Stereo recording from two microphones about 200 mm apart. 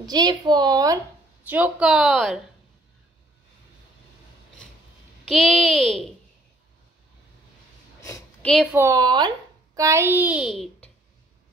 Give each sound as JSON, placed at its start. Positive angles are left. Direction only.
{"t": 0.0, "sound": "a woman's voice", "side_deg": -20}
{"t": 1.5, "sound": "a child's voice", "side_deg": -5}
{"t": 5.2, "sound": "a child's voice", "side_deg": 0}
{"t": 8.0, "sound": "a sound", "side_deg": 15}
{"t": 8.7, "sound": "a woman's voice", "side_deg": -15}